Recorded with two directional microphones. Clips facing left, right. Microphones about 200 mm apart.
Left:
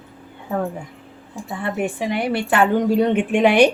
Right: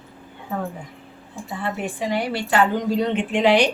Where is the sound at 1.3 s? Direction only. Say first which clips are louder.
Left 3 dB; 55° left (ahead or behind).